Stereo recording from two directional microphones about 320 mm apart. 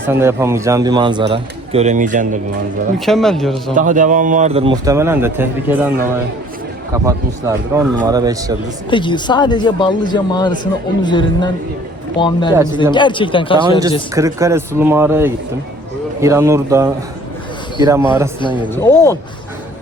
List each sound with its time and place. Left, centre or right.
0.1 s a man's voice: centre; by 2.4 s right
3.1 s speech: centre
3.8 s a man's voice: right; by 5.9 s centre
6.9 s a man's voice: centre
8.9 s speech: centre
14.2 s a man's voice: centre
18.3 s speech: centre